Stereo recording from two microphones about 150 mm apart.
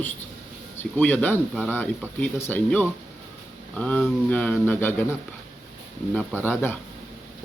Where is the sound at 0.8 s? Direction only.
10° left (ahead or behind).